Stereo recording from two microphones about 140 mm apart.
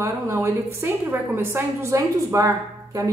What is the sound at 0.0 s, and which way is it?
A woman's voice, 20° right (ahead or behind).